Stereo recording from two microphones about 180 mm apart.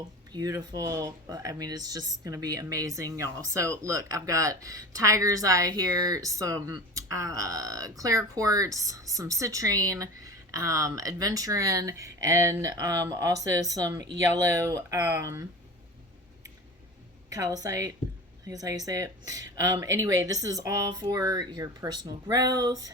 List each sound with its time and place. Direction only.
0.3 s speech: 20° right (ahead or behind)
17.2 s speech: 20° right (ahead or behind)